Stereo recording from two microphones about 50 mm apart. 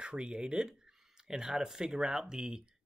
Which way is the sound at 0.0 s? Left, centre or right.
Centre.